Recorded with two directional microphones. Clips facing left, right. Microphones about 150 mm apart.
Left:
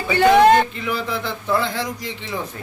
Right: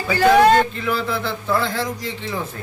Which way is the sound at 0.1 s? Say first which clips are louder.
Left 1 dB; 20° left (ahead or behind).